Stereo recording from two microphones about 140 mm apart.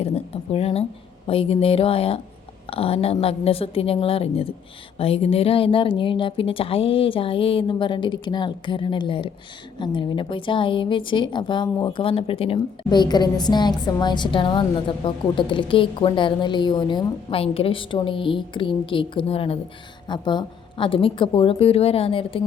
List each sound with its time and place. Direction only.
0.5 s a woman's voice: 45° left (ahead or behind)